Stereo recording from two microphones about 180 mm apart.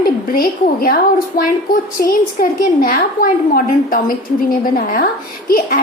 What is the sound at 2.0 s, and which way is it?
A woman's voice, 50° left (ahead or behind).